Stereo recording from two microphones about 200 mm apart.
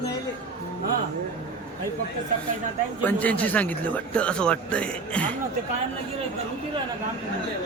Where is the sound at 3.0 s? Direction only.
10° left (ahead or behind).